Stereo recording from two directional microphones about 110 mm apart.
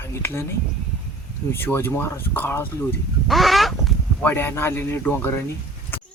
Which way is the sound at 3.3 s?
Centre (ahead or behind).